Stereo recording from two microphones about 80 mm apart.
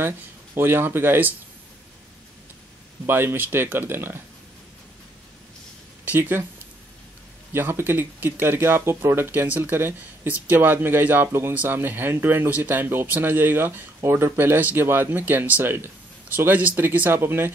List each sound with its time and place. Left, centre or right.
0.6 s speech: right
3.1 s speech: right
6.0 s speech: right
7.5 s speech: right